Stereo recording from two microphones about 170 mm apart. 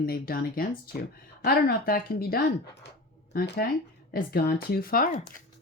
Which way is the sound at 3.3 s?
75° left (ahead or behind).